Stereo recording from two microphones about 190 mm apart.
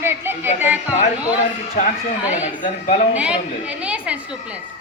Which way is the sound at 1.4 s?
40° left (ahead or behind).